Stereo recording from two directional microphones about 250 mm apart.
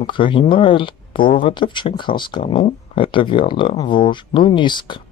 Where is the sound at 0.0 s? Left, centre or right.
Centre.